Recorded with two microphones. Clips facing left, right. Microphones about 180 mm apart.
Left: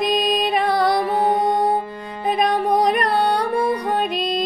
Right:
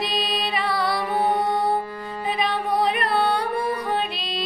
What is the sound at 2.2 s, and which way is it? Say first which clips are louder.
Music: left 6 dB; 45° left (ahead or behind).